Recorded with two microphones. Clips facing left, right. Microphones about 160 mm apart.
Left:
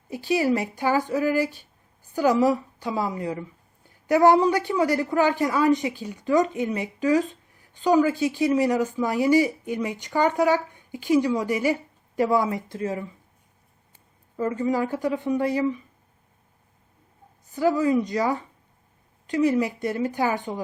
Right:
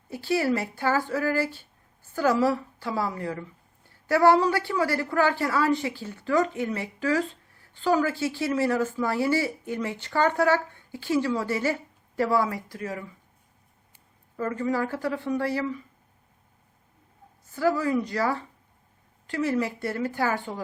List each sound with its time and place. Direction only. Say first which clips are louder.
0.1 s a woman's voice: left 2 dB; 15° left (ahead or behind)
14.3 s speech: left 3 dB; 20° left (ahead or behind)
17.4 s a woman's voice: left 3 dB; 15° left (ahead or behind)